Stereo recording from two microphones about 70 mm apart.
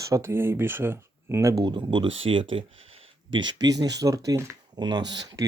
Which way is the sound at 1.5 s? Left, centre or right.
Right.